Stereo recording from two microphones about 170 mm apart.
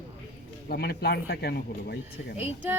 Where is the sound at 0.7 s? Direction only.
65° left (ahead or behind).